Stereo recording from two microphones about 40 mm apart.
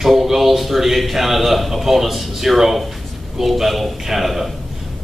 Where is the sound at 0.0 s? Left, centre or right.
Centre.